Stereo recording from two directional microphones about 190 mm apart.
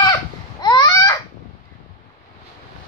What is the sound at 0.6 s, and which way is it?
Babbling, 20° left (ahead or behind).